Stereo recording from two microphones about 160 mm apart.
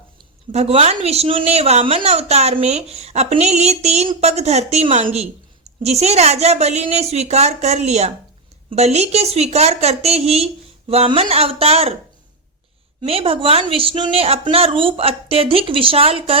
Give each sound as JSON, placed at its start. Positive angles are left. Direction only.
{"t": 0.5, "sound": "a woman's voice", "side_deg": -40}
{"t": 13.0, "sound": "a woman's voice", "side_deg": -35}